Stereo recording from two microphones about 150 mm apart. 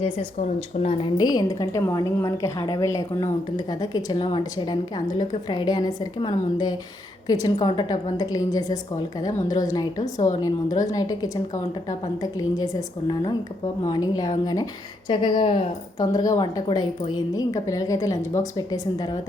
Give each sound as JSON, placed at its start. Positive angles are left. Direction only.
{"t": 0.0, "sound": "speech", "side_deg": 45}